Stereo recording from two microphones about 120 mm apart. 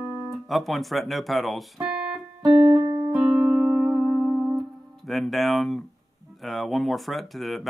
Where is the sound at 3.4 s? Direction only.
15° right (ahead or behind).